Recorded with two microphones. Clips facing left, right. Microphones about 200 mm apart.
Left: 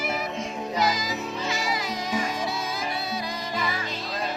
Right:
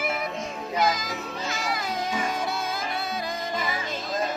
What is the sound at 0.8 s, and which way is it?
Music, 55° right (ahead or behind).